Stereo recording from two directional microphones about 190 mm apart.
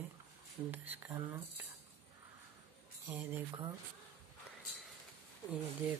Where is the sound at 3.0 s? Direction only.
10° right (ahead or behind).